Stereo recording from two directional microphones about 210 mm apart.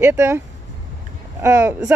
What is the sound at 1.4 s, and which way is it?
Speech, 10° right (ahead or behind).